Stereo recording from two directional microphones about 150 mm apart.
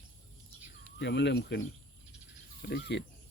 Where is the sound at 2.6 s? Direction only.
90° left.